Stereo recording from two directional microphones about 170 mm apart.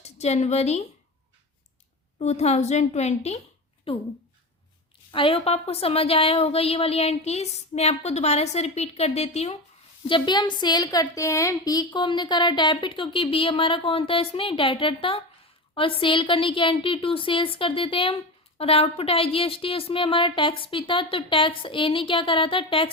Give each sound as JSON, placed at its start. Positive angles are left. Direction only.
{"t": 0.0, "sound": "a woman's voice", "side_deg": 40}
{"t": 2.1, "sound": "a woman's voice", "side_deg": 40}
{"t": 5.1, "sound": "a woman's voice", "side_deg": 30}
{"t": 10.1, "sound": "a woman's voice", "side_deg": 30}